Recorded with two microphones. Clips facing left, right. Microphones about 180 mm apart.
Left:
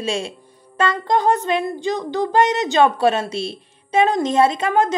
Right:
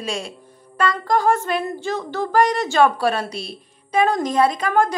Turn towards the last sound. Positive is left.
turn(degrees=20)  # may be behind; listen again after turning